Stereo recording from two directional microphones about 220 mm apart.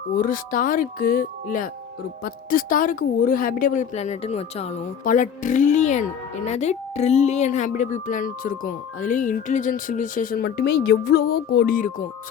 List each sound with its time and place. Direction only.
0.1 s speech: 40° left (ahead or behind)